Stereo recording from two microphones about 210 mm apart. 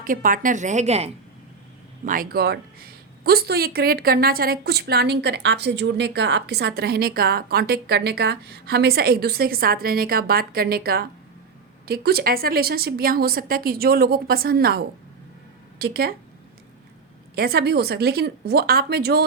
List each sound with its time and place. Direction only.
0.0 s a woman's voice: 40° right (ahead or behind)
2.0 s speech: 45° right (ahead or behind)
17.3 s speech: 45° right (ahead or behind)